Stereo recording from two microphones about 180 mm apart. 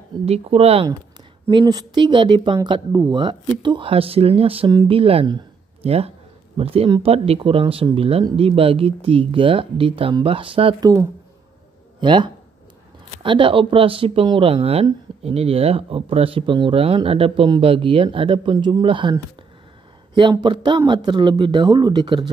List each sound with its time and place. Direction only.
0.2 s speech: 35° right (ahead or behind)
1.5 s speech: 25° right (ahead or behind)
20.2 s speech: 25° right (ahead or behind)